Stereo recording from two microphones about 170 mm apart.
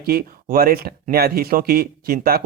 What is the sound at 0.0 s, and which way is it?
Speech, 60° right (ahead or behind).